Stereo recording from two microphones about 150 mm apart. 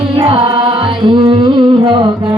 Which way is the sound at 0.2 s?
35° right (ahead or behind).